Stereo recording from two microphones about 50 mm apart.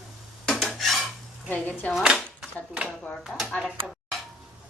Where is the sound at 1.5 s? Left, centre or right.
Left.